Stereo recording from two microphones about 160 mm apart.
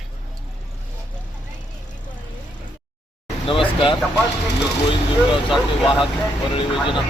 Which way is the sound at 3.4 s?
35° left (ahead or behind).